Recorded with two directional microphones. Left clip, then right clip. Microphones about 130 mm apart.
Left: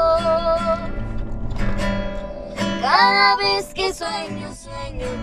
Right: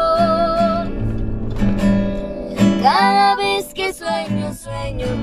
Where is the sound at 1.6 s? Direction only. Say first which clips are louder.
Right 5 dB; 25° right (ahead or behind).